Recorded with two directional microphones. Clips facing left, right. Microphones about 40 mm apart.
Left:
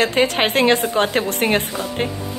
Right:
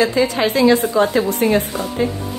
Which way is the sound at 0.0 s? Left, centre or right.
Left.